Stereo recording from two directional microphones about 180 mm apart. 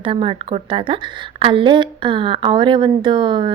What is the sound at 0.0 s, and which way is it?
A woman's voice, 30° right (ahead or behind).